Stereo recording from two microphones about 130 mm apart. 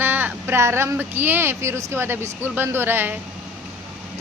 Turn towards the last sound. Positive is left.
turn(degrees=-15)  # may be behind; listen again after turning